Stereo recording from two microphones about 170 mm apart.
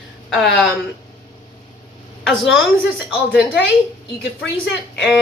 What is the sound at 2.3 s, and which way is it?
Speech, centre (ahead or behind).